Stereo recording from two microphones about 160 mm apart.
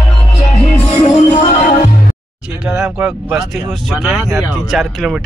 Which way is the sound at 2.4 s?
5° right (ahead or behind).